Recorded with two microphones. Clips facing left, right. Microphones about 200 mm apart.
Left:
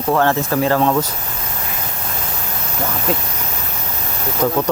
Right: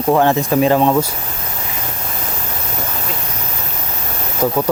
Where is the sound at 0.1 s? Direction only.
15° right (ahead or behind).